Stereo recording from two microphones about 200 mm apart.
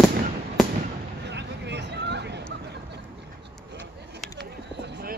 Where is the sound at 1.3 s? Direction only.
60° right (ahead or behind).